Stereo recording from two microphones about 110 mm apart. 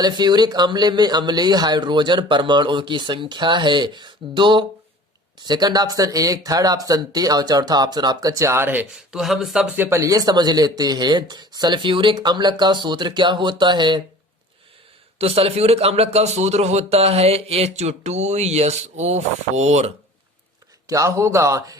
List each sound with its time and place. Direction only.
0.0 s speech: 40° right (ahead or behind); by 8.9 s 20° right (ahead or behind)
9.0 s speech: 5° right (ahead or behind)
9.7 s speech: 20° right (ahead or behind); by 14.0 s 45° right (ahead or behind)
15.2 s a man's voice: 65° right (ahead or behind); by 19.9 s 90° right
20.8 s speech: 30° right (ahead or behind)